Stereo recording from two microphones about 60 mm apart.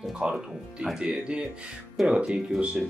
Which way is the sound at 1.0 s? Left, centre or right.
Centre.